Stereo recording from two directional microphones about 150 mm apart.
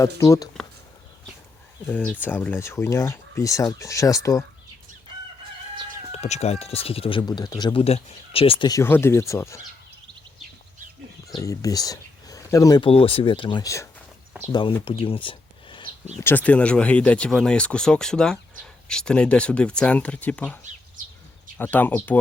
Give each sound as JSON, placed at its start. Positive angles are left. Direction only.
{"t": 0.2, "sound": "speech", "side_deg": 25}
{"t": 1.9, "sound": "speech", "side_deg": 10}
{"t": 6.1, "sound": "speech", "side_deg": 45}
{"t": 8.8, "sound": "speech", "side_deg": 15}
{"t": 11.3, "sound": "speech", "side_deg": 25}
{"t": 12.8, "sound": "speech", "side_deg": 40}
{"t": 14.8, "sound": "a sound", "side_deg": 40}
{"t": 16.2, "sound": "speech", "side_deg": 10}
{"t": 21.6, "sound": "speech", "side_deg": 10}